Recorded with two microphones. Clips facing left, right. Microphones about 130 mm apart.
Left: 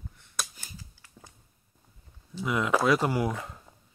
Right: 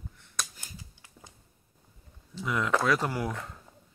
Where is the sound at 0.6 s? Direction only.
20° right (ahead or behind).